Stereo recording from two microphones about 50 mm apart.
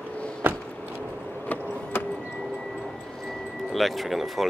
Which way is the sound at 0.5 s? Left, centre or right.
Left.